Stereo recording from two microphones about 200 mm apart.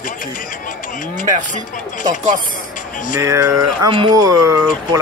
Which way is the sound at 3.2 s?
15° right (ahead or behind).